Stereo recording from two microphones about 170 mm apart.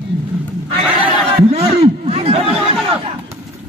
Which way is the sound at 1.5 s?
35° right (ahead or behind).